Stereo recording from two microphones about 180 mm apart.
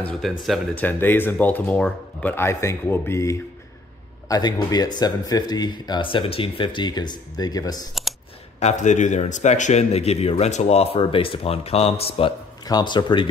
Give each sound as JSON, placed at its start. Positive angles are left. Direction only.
{"t": 0.0, "sound": "speech", "side_deg": 0}
{"t": 8.5, "sound": "a man's voice", "side_deg": 40}
{"t": 12.6, "sound": "speech", "side_deg": 25}